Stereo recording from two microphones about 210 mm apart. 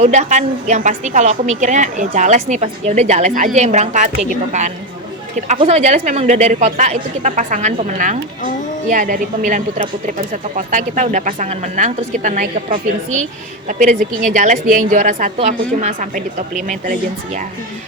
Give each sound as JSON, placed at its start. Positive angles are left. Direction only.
{"t": 0.0, "sound": "a woman's voice", "side_deg": -35}